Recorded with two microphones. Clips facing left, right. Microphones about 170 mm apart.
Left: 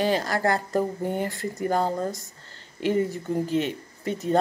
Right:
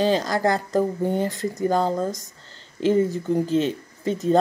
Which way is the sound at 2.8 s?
25° right (ahead or behind).